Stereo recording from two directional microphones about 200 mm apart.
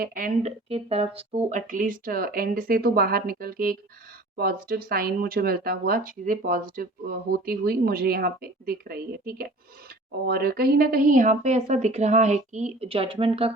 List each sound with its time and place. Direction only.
0.0 s speech: 45° right (ahead or behind)
0.7 s a woman's voice: 30° right (ahead or behind)